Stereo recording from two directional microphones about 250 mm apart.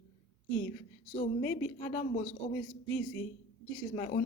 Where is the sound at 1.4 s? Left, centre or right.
Centre.